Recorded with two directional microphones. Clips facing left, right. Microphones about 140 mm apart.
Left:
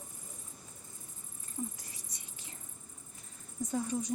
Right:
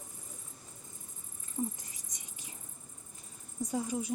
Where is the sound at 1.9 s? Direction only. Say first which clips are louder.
Even; 15° right (ahead or behind).